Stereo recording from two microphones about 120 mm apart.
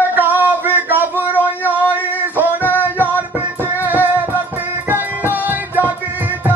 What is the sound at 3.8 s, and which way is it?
Music, 15° right (ahead or behind).